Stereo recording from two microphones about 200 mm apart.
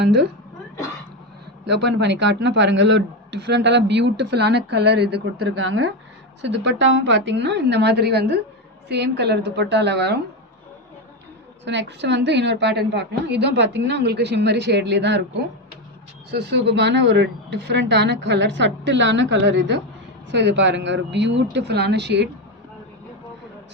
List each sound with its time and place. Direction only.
0.0 s a man's voice: 55° right (ahead or behind)
1.6 s a man's voice: 60° right (ahead or behind)
11.6 s a man's voice: 60° right (ahead or behind)
16.3 s a man's voice: 55° right (ahead or behind)